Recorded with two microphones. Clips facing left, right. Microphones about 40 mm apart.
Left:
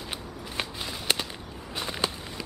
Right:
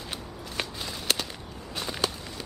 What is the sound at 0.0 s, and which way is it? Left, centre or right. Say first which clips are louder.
Walk: left 1 dB; centre.